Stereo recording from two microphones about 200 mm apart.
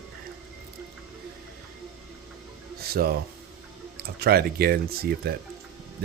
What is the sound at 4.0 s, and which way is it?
Speech, 50° right (ahead or behind).